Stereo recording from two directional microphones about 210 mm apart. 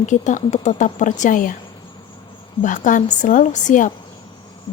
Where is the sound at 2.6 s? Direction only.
40° left (ahead or behind).